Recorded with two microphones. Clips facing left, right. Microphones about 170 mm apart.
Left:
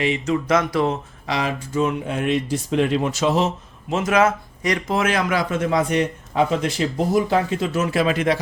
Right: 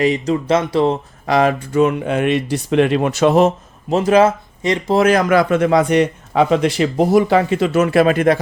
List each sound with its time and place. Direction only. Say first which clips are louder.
0.0 s speech: right 5 dB; 35° right (ahead or behind)
1.3 s speech: right 9 dB; 55° right (ahead or behind)
3.8 s speech: right 6 dB; 35° right (ahead or behind); by 8.4 s 50° right (ahead or behind)